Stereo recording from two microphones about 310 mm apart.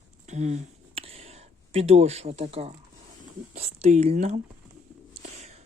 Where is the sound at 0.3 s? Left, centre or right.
Right.